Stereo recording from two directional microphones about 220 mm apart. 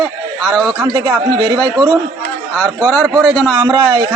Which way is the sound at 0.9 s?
20° right (ahead or behind).